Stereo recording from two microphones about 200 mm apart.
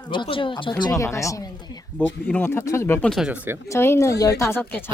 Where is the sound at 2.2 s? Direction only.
10° left (ahead or behind); by 3.6 s 5° right (ahead or behind).